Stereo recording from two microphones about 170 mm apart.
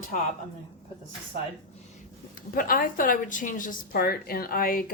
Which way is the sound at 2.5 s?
55° left (ahead or behind).